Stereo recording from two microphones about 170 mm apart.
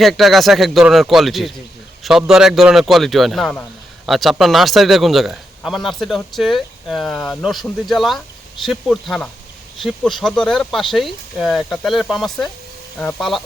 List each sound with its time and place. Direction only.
0.0 s a man's voice: centre (ahead or behind)